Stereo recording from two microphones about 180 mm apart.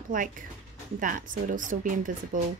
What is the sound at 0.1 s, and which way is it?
Speech, 50° right (ahead or behind).